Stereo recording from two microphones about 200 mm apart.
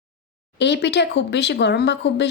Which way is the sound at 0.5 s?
60° left (ahead or behind).